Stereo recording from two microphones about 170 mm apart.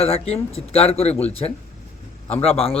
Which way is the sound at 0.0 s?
35° left (ahead or behind).